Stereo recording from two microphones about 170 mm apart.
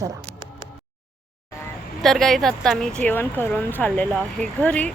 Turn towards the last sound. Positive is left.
turn(degrees=10)  # may be behind; listen again after turning